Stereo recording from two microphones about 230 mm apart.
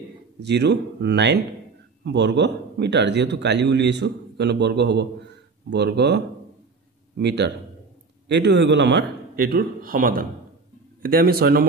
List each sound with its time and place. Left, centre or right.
0.4 s a man's voice: right